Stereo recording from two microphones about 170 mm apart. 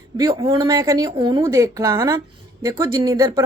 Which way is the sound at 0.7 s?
20° right (ahead or behind).